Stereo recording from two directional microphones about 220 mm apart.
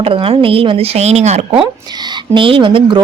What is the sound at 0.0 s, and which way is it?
A woman's voice, 25° right (ahead or behind).